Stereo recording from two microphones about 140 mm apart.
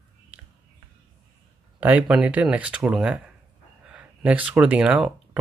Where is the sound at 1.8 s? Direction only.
10° right (ahead or behind).